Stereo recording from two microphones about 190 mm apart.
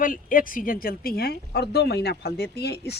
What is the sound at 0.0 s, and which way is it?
Speech, 45° left (ahead or behind).